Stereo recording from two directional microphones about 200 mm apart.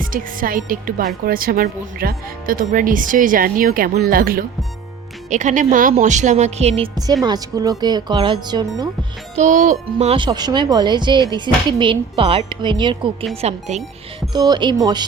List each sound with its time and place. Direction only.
0.0 s a woman's voice: 45° right (ahead or behind); by 8.6 s 25° right (ahead or behind)
9.3 s speech: 40° right (ahead or behind)
14.3 s speech: 20° right (ahead or behind)